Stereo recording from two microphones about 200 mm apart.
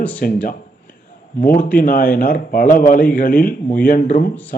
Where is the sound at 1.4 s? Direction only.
45° left (ahead or behind).